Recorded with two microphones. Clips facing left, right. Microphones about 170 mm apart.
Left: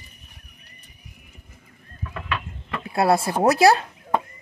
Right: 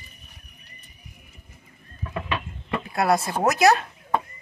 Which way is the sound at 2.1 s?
15° right (ahead or behind).